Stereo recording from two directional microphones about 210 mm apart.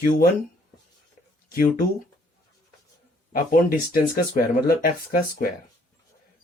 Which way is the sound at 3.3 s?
40° left (ahead or behind).